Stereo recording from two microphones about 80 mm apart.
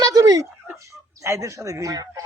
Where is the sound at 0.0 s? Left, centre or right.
Right.